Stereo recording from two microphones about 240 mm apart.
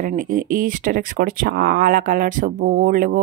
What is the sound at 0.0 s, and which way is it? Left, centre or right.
Speech, right.